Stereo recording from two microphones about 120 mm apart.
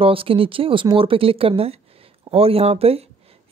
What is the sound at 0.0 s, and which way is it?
Speech, 50° right (ahead or behind).